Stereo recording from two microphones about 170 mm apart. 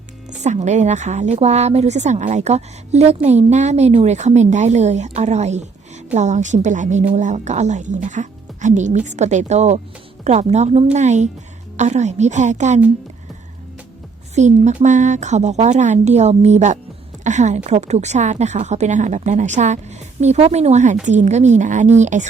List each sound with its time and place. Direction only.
0.3 s a woman's voice: 45° right (ahead or behind)
14.3 s a woman's voice: 45° right (ahead or behind)